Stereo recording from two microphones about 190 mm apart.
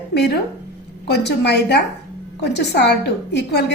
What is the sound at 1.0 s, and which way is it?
A woman's voice, 60° left (ahead or behind).